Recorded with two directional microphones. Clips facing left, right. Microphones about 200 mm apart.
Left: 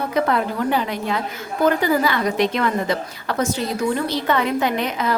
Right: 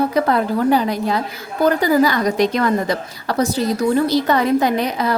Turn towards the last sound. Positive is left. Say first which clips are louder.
# right 3 dB
turn(degrees=-35)  # may be behind; listen again after turning